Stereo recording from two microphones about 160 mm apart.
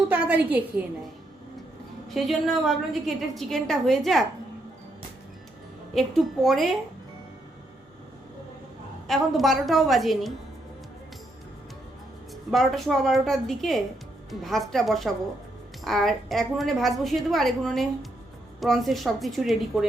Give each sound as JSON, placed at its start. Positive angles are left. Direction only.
{"t": 0.1, "sound": "a woman's voice", "side_deg": -10}
{"t": 2.0, "sound": "a woman's voice", "side_deg": 0}
{"t": 5.9, "sound": "a woman's voice", "side_deg": 0}
{"t": 9.0, "sound": "a woman's voice", "side_deg": 0}
{"t": 12.5, "sound": "a woman's voice", "side_deg": 0}